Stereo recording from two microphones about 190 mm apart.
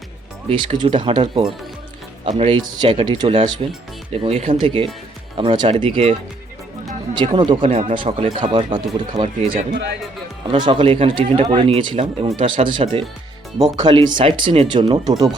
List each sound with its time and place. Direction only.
0.4 s speech: 25° right (ahead or behind)
7.3 s speech: 25° right (ahead or behind)